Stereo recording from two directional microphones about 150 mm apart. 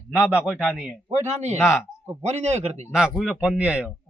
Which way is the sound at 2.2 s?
50° right (ahead or behind).